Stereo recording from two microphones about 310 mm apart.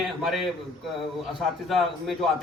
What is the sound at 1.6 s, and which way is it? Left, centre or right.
Speech, centre.